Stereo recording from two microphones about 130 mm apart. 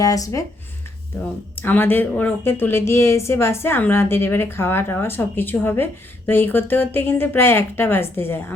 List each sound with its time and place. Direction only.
0.0 s speech: 25° left (ahead or behind)
1.5 s a woman's voice: 15° left (ahead or behind)